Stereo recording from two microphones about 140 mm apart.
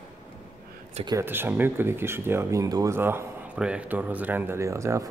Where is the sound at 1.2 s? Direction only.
15° right (ahead or behind).